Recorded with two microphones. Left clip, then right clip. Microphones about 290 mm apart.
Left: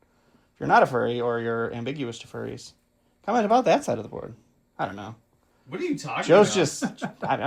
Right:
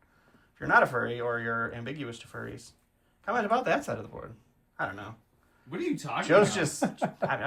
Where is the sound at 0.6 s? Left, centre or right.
Centre.